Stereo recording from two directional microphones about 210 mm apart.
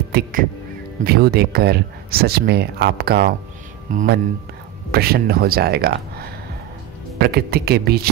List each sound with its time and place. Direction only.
0.1 s speech: 45° right (ahead or behind)